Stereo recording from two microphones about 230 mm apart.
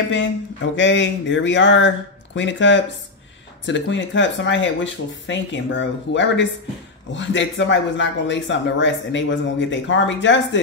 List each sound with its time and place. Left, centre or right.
0.7 s speech: left